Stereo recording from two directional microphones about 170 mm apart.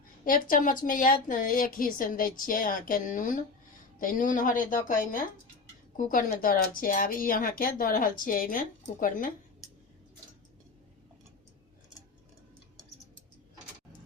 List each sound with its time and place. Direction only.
0.3 s speech: 55° left (ahead or behind)